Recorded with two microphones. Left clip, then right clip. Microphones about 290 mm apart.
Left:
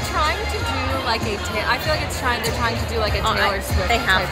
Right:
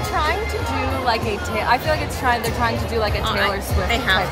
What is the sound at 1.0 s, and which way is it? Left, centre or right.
A woman's voice, centre.